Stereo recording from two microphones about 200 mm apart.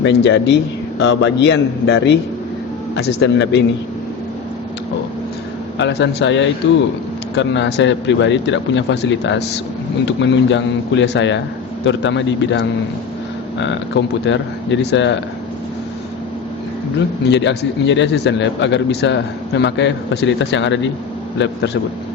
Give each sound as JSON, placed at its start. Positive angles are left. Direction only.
{"t": 0.0, "sound": "speech", "side_deg": 60}
{"t": 5.8, "sound": "speech", "side_deg": 60}
{"t": 17.2, "sound": "speech", "side_deg": 60}